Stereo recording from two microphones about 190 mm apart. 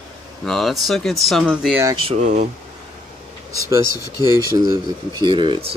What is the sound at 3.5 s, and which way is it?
Speech, 15° right (ahead or behind).